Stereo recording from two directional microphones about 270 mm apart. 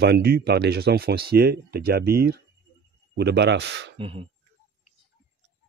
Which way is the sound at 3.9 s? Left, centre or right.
Centre.